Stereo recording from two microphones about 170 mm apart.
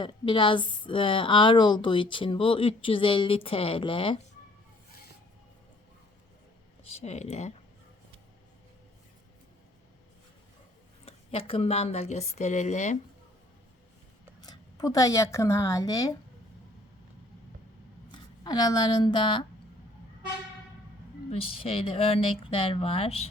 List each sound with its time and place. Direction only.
0.0 s a woman's voice: 30° left (ahead or behind)
6.9 s a woman's voice: 40° left (ahead or behind)
11.0 s a woman's voice: 35° left (ahead or behind)
14.4 s a woman's voice: 25° left (ahead or behind)
18.1 s speech: 25° left (ahead or behind)
21.2 s a woman's voice: 35° left (ahead or behind)